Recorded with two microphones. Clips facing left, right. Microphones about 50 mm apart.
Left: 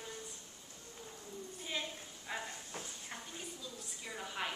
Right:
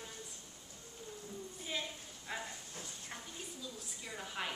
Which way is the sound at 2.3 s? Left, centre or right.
Centre.